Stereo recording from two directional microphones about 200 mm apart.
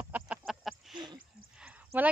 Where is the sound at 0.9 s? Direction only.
20° right (ahead or behind).